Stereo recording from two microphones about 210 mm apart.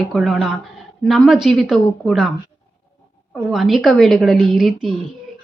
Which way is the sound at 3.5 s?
Centre (ahead or behind).